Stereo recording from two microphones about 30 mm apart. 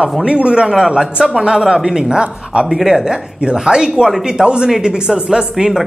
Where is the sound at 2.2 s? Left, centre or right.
Right.